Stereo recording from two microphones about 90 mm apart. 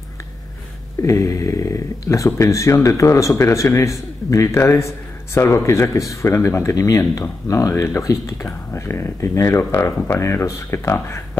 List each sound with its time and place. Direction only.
1.0 s speech: 35° left (ahead or behind)